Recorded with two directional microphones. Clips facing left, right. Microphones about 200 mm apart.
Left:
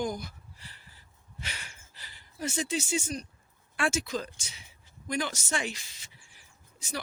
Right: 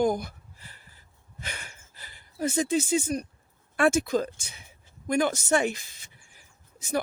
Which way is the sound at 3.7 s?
50° right (ahead or behind).